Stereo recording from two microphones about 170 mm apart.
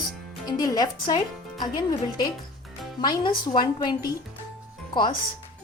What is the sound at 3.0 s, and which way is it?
A woman's voice, 25° left (ahead or behind).